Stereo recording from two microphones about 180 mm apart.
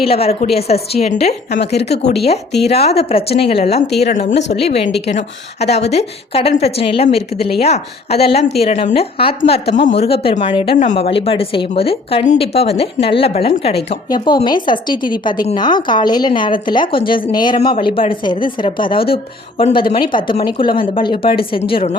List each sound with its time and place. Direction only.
0.0 s a woman's voice: 35° left (ahead or behind)
10.8 s a woman's voice: 40° left (ahead or behind)